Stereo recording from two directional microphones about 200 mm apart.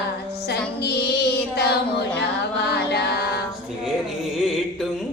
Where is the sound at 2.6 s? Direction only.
55° left (ahead or behind).